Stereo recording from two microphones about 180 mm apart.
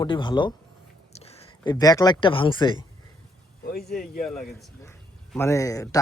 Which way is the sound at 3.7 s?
Centre (ahead or behind).